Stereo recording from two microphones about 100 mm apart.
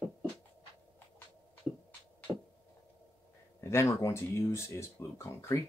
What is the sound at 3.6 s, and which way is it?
Speech, 30° left (ahead or behind).